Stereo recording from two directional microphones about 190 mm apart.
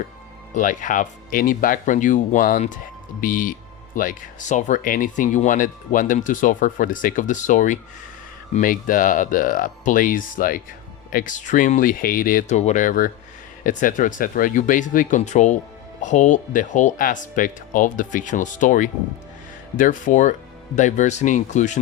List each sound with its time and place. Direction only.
0.5 s speech: 40° left (ahead or behind)